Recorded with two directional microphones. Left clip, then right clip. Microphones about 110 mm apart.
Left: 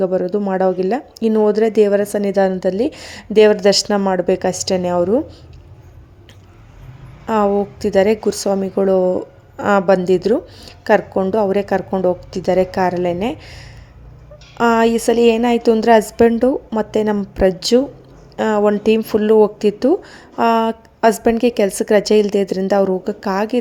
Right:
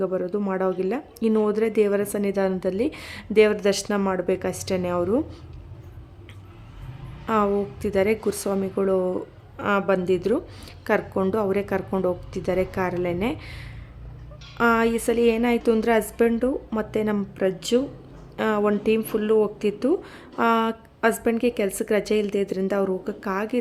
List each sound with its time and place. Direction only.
0.0 s a woman's voice: 35° left (ahead or behind)
7.3 s a woman's voice: 25° left (ahead or behind)
9.6 s a woman's voice: 45° left (ahead or behind); by 13.7 s 20° left (ahead or behind)
14.6 s speech: 35° left (ahead or behind)
21.0 s speech: 45° left (ahead or behind)